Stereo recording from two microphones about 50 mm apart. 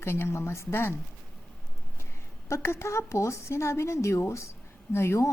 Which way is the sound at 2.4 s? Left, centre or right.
Left.